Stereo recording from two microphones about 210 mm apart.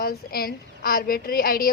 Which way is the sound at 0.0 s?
45° left (ahead or behind).